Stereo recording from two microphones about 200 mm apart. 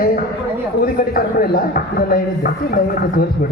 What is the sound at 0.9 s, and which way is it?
Speech, 45° left (ahead or behind).